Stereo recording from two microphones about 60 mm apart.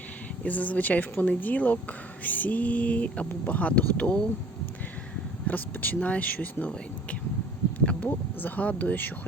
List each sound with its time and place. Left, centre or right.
0.4 s a woman's voice: left
5.5 s a woman's voice: left